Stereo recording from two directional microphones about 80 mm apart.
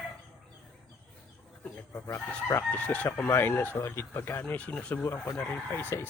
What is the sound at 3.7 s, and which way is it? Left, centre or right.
Speech, left.